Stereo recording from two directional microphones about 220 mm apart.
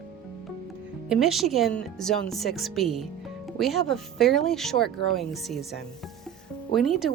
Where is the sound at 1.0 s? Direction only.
Centre (ahead or behind).